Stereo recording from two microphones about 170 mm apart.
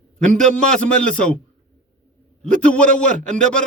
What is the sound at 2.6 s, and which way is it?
Speech, 5° left (ahead or behind).